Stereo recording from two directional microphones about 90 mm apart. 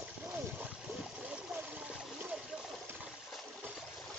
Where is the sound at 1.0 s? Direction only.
10° right (ahead or behind).